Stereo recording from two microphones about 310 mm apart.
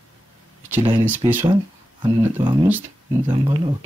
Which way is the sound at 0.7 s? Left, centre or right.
Centre.